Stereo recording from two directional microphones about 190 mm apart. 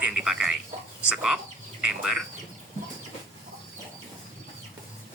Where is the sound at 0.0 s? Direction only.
5° right (ahead or behind).